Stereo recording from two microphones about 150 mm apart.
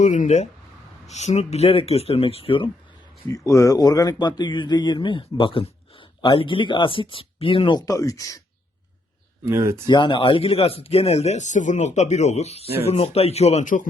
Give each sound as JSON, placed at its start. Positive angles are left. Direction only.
{"t": 0.0, "sound": "speech", "side_deg": 55}
{"t": 3.2, "sound": "speech", "side_deg": 20}
{"t": 9.5, "sound": "speech", "side_deg": -20}
{"t": 9.8, "sound": "speech", "side_deg": 30}